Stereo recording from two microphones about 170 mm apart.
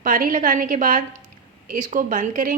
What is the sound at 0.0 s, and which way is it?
A woman's voice, 55° right (ahead or behind).